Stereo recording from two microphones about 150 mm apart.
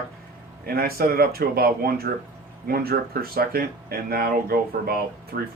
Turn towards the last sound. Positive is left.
turn(degrees=-75)  # may be behind; listen again after turning